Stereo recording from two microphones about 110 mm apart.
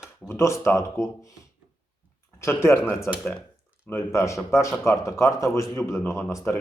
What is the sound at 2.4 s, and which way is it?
Speech, 25° left (ahead or behind).